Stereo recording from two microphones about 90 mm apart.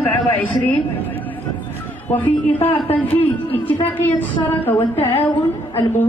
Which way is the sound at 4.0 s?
20° left (ahead or behind).